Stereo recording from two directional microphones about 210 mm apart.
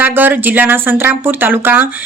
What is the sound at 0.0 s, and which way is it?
Speech, 10° right (ahead or behind).